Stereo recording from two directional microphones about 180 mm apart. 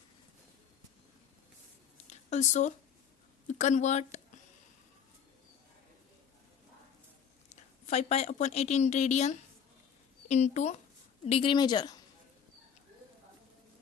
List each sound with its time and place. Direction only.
2.0 s a sound: 40° left (ahead or behind)
3.4 s speech: 40° left (ahead or behind)
7.5 s a woman's voice: 40° left (ahead or behind); by 11.9 s 25° left (ahead or behind)